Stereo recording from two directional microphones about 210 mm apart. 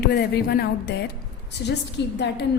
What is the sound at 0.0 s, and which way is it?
A woman's voice, 50° left (ahead or behind).